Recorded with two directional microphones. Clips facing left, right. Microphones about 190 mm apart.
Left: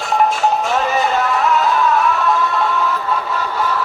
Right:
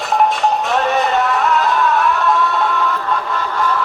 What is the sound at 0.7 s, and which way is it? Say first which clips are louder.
Music: right 1 dB; centre (ahead or behind).